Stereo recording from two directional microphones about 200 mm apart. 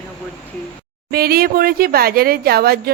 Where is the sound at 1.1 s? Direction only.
50° right (ahead or behind).